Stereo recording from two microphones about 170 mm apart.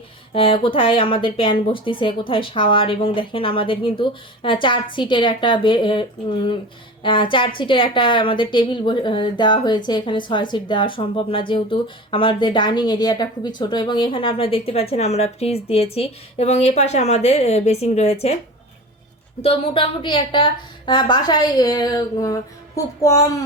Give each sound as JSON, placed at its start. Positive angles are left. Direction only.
{"t": 0.3, "sound": "a woman's voice", "side_deg": 30}
{"t": 19.4, "sound": "a woman's voice", "side_deg": 35}